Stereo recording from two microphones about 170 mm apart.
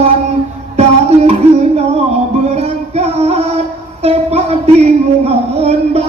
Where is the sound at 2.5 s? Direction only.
40° right (ahead or behind).